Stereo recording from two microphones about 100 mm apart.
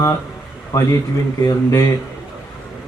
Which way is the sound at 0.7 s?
30° left (ahead or behind).